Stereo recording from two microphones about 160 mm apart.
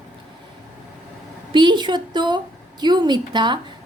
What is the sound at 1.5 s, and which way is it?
A woman's voice, 30° right (ahead or behind).